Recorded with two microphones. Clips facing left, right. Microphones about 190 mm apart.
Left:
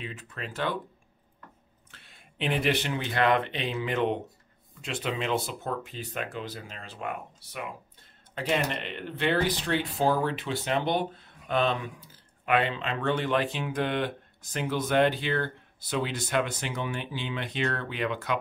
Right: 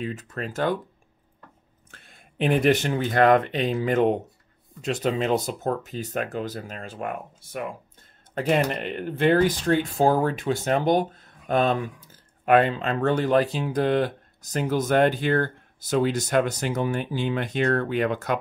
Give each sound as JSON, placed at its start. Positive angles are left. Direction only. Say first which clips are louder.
{"t": 0.0, "sound": "speech", "louder": "right 8 dB", "side_deg": -45}
{"t": 1.9, "sound": "speech", "louder": "right 4 dB", "side_deg": -45}